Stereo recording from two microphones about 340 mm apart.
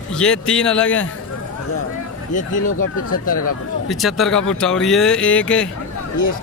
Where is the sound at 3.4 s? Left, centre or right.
Left.